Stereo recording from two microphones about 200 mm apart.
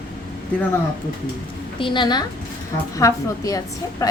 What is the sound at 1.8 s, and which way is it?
A woman's voice, 25° left (ahead or behind).